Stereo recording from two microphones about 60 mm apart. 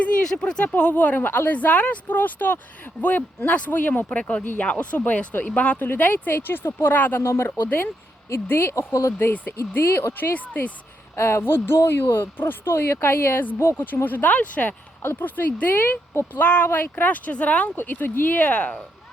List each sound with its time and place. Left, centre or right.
0.3 s speech: centre
0.7 s speech: left
7.2 s speech: left
8.9 s speech: left
9.1 s speech: left
9.6 s speech: left
10.3 s speech: left
11.1 s speech: left
13.9 s speech: left
15.0 s speech: left
16.6 s speech: left
17.7 s speech: left